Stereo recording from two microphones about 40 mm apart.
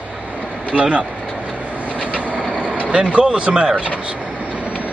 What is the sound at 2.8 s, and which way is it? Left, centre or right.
Speech, right.